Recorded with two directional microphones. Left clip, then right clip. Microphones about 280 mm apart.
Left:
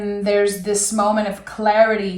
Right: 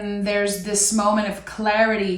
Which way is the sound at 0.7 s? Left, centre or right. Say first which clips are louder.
Left 2 dB; centre.